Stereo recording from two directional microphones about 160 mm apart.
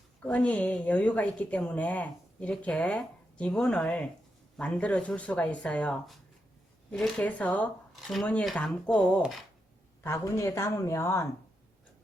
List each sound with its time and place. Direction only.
0.2 s speech: 10° left (ahead or behind)
10.0 s speech: 15° left (ahead or behind)